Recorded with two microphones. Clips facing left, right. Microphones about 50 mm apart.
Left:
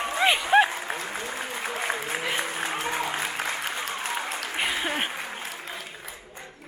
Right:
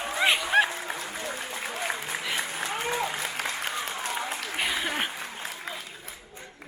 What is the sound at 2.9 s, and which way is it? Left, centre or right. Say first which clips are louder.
Applause: left 1 dB; left.